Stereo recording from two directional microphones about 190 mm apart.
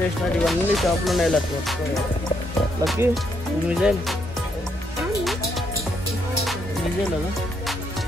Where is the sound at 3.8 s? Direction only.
5° right (ahead or behind).